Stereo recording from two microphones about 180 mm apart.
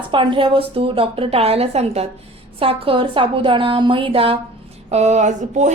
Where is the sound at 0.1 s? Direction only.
25° right (ahead or behind).